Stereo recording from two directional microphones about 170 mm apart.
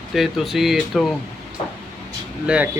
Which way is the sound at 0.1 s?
Centre (ahead or behind).